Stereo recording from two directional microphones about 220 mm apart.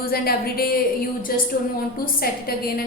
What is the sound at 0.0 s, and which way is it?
A woman's voice, 45° left (ahead or behind).